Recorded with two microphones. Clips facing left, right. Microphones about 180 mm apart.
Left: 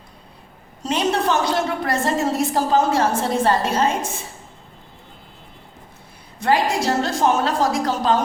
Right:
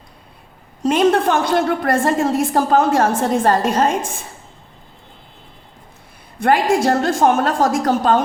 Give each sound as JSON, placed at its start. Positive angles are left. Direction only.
{"t": 0.8, "sound": "a woman's voice", "side_deg": -55}
{"t": 6.4, "sound": "a woman's voice", "side_deg": -50}